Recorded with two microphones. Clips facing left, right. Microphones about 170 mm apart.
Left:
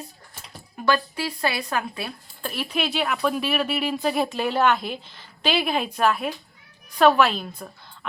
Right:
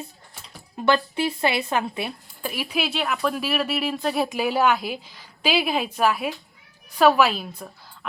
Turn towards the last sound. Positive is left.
turn(degrees=-5)  # may be behind; listen again after turning